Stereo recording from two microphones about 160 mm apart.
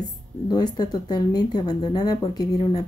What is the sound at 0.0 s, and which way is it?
Speech, 25° left (ahead or behind).